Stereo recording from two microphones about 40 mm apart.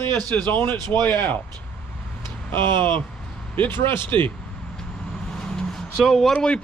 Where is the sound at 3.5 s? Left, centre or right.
Left.